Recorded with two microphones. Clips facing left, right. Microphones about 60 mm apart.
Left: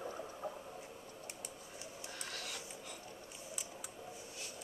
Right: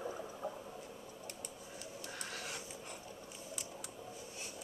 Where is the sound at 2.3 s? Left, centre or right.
Centre.